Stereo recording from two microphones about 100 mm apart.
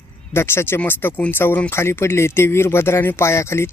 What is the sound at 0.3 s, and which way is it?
Speech, 25° left (ahead or behind).